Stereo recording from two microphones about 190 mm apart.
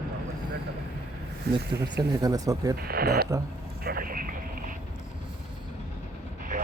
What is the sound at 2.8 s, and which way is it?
Speech, 55° right (ahead or behind).